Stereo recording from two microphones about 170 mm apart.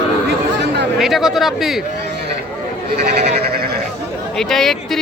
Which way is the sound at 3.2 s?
70° right (ahead or behind).